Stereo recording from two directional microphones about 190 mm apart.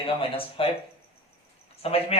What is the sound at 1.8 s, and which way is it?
Speech, 30° left (ahead or behind).